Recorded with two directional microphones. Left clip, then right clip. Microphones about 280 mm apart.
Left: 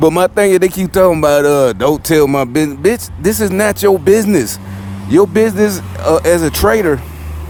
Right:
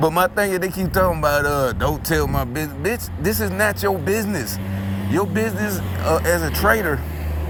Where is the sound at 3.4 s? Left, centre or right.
Left.